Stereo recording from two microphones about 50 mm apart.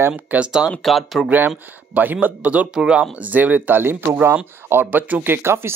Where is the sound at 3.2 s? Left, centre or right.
Right.